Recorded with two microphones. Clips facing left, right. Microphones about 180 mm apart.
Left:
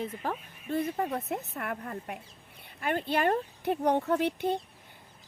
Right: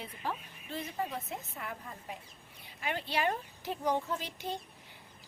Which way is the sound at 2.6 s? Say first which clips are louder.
Left 6 dB; 50° left (ahead or behind).